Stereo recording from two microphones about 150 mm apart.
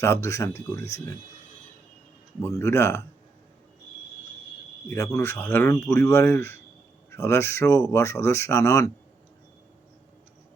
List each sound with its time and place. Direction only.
0.0 s speech: 20° left (ahead or behind)
2.4 s speech: 20° left (ahead or behind)
4.9 s speech: 20° left (ahead or behind)